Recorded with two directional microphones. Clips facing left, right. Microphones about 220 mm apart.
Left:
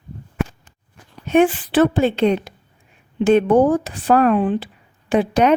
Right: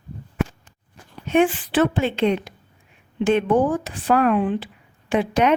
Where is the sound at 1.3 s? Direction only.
40° left (ahead or behind).